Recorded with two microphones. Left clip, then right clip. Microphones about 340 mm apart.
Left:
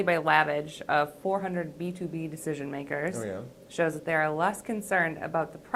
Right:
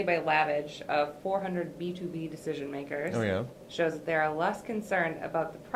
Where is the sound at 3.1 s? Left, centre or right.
Right.